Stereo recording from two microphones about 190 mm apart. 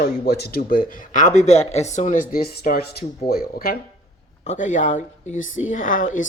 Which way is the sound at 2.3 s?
50° left (ahead or behind).